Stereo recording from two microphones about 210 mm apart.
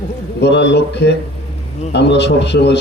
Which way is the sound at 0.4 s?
55° left (ahead or behind).